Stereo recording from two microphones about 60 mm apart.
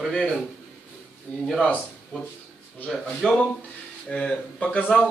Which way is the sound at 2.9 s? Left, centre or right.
Centre.